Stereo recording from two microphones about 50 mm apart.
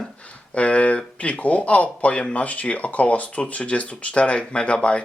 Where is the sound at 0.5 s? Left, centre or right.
Left.